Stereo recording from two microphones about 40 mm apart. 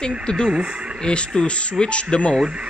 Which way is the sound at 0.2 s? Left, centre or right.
Centre.